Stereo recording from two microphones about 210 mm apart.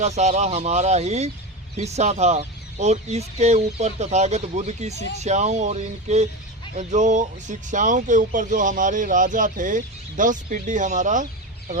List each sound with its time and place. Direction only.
0.0 s speech: 30° right (ahead or behind)